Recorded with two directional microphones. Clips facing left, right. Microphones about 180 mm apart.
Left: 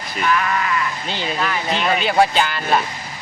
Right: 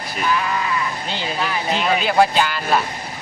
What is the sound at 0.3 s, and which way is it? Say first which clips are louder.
Sheep: left 1 dB; 15° right (ahead or behind).